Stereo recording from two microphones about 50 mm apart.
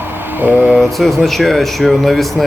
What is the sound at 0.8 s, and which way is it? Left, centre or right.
Speech, centre.